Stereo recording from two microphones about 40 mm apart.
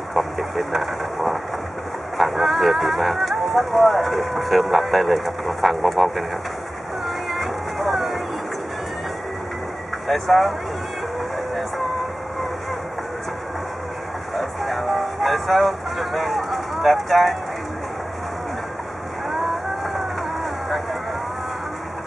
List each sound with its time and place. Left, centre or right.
0.6 s vehicle: centre
2.1 s speech: centre
7.1 s music: centre
10.0 s speech: centre
14.3 s music: centre